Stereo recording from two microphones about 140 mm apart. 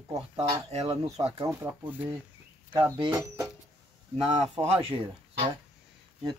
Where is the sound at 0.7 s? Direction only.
50° right (ahead or behind).